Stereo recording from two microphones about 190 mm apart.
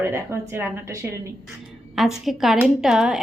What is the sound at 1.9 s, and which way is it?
A woman's voice, centre (ahead or behind).